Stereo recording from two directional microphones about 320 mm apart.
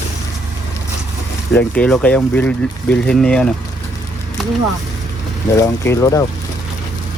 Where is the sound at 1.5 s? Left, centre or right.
Centre.